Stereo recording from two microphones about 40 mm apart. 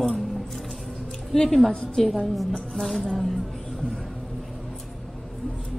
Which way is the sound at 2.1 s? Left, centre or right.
Centre.